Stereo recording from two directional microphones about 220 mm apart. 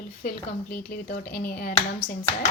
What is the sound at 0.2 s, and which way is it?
Speech, 40° left (ahead or behind).